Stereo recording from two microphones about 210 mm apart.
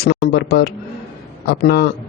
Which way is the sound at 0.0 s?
50° left (ahead or behind).